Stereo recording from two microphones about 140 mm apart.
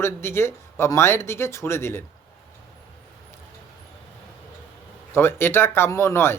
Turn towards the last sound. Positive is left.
turn(degrees=20)  # may be behind; listen again after turning